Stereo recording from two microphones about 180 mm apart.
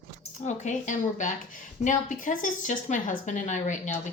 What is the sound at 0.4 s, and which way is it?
Speech, 45° left (ahead or behind).